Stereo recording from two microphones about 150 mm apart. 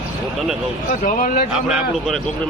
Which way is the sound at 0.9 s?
60° left (ahead or behind).